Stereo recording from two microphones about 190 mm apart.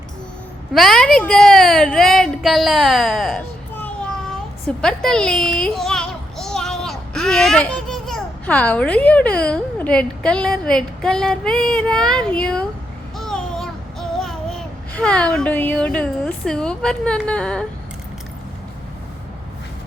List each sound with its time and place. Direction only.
0.7 s a child's voice: centre (ahead or behind)
13.1 s a sound: centre (ahead or behind)
14.2 s a child's voice: centre (ahead or behind)